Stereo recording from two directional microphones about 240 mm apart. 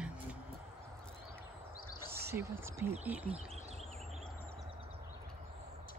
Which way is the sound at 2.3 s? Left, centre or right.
Centre.